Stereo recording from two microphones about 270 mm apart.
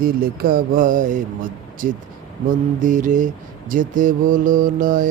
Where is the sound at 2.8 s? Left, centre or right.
Right.